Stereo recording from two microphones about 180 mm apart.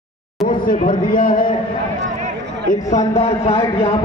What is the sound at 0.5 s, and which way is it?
Speech, 50° left (ahead or behind).